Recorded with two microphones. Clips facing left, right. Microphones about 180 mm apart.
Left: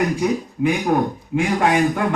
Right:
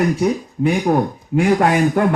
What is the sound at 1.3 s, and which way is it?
Speech, 40° right (ahead or behind).